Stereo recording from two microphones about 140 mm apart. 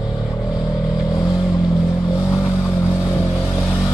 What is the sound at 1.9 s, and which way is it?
Vehicle, 25° left (ahead or behind).